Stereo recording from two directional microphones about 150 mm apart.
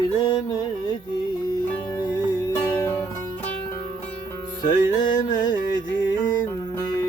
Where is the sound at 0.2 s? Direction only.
30° left (ahead or behind).